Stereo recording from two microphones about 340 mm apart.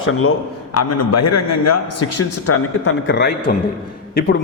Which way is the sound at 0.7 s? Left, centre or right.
Left.